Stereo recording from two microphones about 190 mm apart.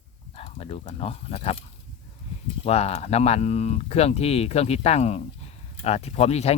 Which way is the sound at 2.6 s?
35° left (ahead or behind).